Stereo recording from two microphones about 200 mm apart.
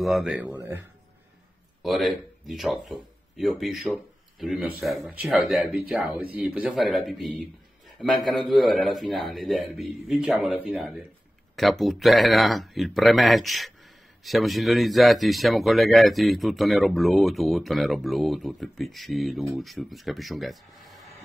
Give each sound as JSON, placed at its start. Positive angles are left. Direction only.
{"t": 0.0, "sound": "speech", "side_deg": 0}